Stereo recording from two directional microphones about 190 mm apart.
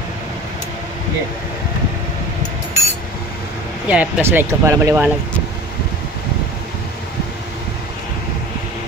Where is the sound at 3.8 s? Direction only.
10° right (ahead or behind).